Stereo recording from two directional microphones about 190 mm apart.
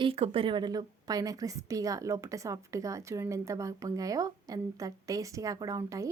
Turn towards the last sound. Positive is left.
turn(degrees=-20)  # may be behind; listen again after turning